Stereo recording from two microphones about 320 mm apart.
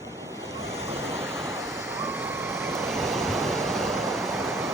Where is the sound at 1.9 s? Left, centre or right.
Centre.